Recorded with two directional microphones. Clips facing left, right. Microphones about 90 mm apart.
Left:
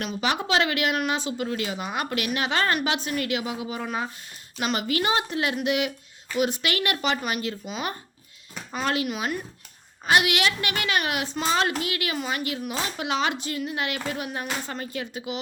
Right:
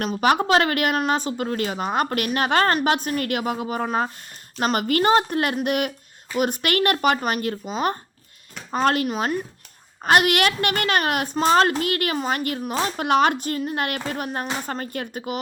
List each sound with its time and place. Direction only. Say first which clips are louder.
0.0 s a woman's voice: right 7 dB; 45° right (ahead or behind)
10.0 s a woman's voice: right 4 dB; 50° right (ahead or behind)